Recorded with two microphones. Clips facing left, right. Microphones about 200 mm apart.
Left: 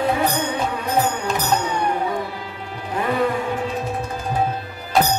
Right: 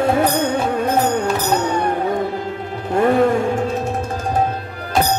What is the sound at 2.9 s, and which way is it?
Music, 45° right (ahead or behind).